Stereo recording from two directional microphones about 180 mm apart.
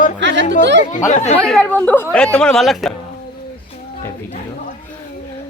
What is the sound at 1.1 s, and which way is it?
Speech, 40° left (ahead or behind).